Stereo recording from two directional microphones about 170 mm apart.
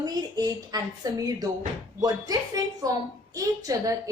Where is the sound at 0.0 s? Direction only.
25° right (ahead or behind).